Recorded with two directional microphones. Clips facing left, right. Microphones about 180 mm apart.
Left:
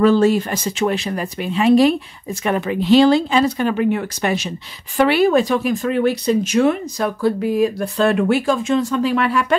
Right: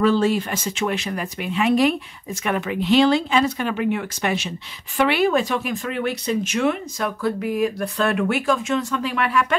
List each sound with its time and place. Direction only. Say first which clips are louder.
0.0 s speech: left 5 dB; 45° left (ahead or behind)